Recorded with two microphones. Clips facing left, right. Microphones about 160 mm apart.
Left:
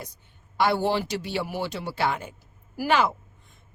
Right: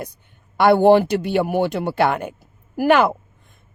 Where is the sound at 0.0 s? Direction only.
60° right (ahead or behind).